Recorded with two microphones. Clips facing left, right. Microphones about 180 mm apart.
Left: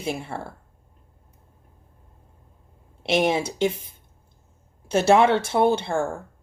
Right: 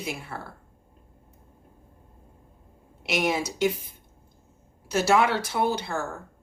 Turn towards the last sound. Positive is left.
turn(degrees=25)  # may be behind; listen again after turning